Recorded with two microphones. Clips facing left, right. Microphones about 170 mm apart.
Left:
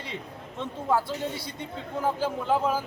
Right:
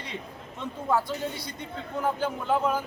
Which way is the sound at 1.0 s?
30° left (ahead or behind).